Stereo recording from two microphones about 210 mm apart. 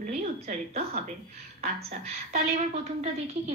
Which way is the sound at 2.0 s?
30° right (ahead or behind).